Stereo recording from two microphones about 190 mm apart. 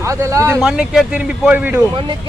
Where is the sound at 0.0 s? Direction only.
15° right (ahead or behind).